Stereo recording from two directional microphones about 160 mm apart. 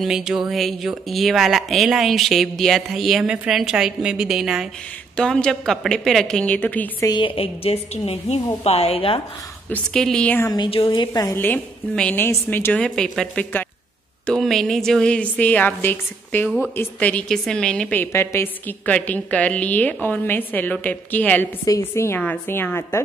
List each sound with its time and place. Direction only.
0.0 s speech: 5° right (ahead or behind)
7.1 s a woman's voice: 30° left (ahead or behind)
9.7 s a woman's voice: 5° left (ahead or behind)
10.5 s a woman's voice: 30° left (ahead or behind); by 16.4 s 10° left (ahead or behind)
16.4 s a woman's voice: 5° right (ahead or behind)
16.7 s a woman's voice: 10° left (ahead or behind)